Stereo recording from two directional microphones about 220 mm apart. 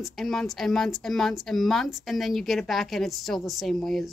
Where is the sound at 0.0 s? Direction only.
Centre (ahead or behind).